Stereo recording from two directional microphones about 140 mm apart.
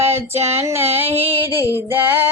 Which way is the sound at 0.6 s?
20° right (ahead or behind).